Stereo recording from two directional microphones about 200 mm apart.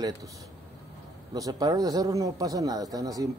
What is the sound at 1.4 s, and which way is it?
Speech, 15° right (ahead or behind).